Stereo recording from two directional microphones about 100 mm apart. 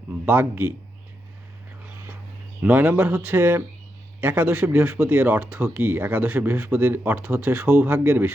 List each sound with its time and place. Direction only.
0.3 s speech: 20° right (ahead or behind)
2.6 s speech: 15° right (ahead or behind)